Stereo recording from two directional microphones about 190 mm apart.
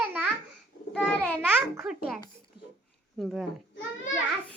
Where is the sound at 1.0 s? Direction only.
10° left (ahead or behind).